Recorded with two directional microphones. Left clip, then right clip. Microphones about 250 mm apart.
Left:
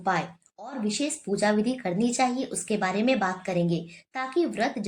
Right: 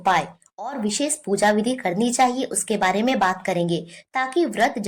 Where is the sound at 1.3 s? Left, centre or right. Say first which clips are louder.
Right 6 dB; right.